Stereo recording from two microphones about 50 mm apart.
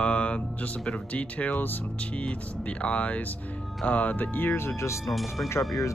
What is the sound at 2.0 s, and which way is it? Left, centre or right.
Speech, left.